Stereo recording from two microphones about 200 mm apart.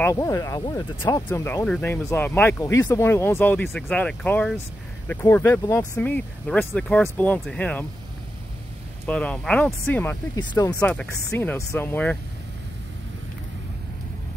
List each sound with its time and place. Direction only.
0.0 s speech: 15° left (ahead or behind)
9.0 s speech: 5° left (ahead or behind)